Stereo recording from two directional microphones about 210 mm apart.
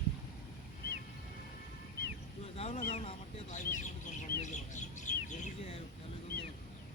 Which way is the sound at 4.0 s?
35° left (ahead or behind).